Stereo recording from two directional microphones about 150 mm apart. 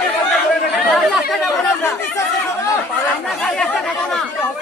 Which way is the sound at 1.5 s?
20° left (ahead or behind).